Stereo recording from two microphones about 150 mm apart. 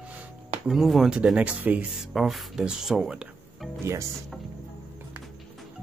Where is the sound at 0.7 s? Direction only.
Centre (ahead or behind).